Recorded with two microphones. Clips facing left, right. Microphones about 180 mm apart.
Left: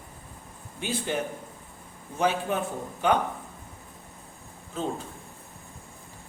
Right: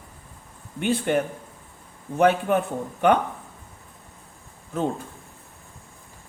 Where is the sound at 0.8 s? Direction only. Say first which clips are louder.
Right 7 dB; 60° right (ahead or behind).